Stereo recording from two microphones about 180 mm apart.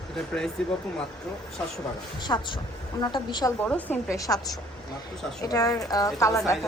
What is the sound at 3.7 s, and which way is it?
A woman's voice, 10° left (ahead or behind).